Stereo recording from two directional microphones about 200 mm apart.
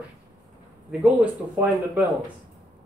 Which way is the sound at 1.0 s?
5° right (ahead or behind).